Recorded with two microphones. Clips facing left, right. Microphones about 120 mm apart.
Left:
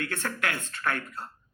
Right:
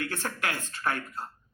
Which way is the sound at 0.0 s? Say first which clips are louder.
Left 1 dB; 30° right (ahead or behind).